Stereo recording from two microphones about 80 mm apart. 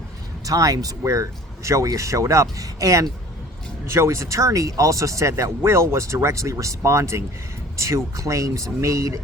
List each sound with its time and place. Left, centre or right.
0.4 s speech: right